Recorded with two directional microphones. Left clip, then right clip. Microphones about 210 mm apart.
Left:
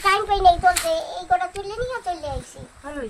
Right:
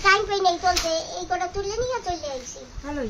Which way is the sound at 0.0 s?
5° right (ahead or behind).